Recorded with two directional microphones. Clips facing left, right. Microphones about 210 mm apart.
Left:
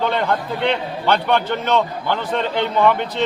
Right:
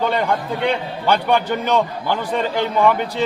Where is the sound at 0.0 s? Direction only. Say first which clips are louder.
Even; 10° right (ahead or behind).